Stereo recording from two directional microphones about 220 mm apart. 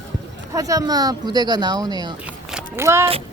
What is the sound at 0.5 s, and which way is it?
Speech, 15° right (ahead or behind).